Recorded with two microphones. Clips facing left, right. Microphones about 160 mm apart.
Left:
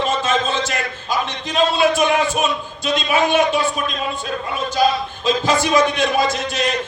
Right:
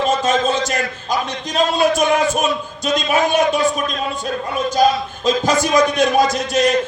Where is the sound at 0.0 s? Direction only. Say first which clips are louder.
Right 3 dB; 40° right (ahead or behind).